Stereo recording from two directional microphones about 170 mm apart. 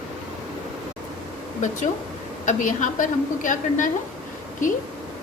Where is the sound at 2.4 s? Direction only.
45° left (ahead or behind).